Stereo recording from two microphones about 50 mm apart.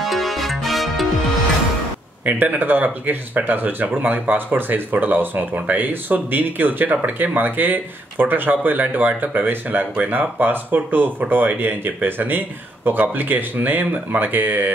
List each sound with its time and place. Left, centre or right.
0.0 s music: centre
2.2 s speech: right